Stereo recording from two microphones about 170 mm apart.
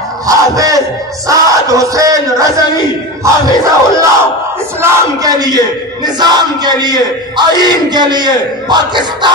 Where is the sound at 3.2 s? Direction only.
20° right (ahead or behind).